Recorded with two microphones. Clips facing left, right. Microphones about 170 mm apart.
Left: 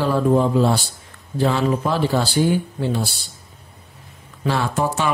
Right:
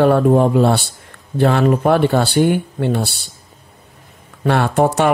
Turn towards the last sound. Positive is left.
turn(degrees=-65)  # may be behind; listen again after turning